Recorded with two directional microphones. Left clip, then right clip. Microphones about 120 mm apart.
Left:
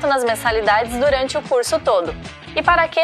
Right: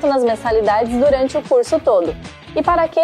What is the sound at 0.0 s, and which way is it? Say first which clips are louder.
A woman's voice: right 1 dB; 30° right (ahead or behind).